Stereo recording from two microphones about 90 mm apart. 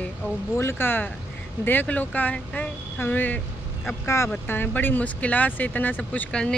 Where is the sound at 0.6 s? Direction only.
25° left (ahead or behind).